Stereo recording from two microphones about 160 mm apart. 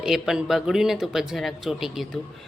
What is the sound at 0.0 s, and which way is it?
A woman's voice, centre (ahead or behind).